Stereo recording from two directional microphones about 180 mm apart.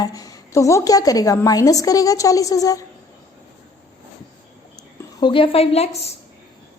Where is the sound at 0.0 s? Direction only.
20° left (ahead or behind).